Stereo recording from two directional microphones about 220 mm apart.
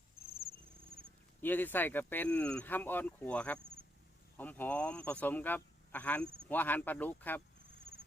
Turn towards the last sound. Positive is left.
turn(degrees=10)  # may be behind; listen again after turning